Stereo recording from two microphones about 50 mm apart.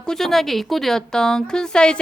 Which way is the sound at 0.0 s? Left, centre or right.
Centre.